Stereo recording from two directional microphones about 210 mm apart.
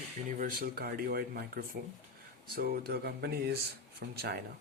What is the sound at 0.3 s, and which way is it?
Speech, 40° right (ahead or behind).